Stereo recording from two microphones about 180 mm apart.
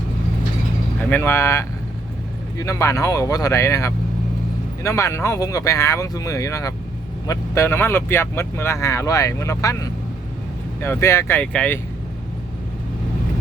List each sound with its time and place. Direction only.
1.1 s speech: 15° left (ahead or behind)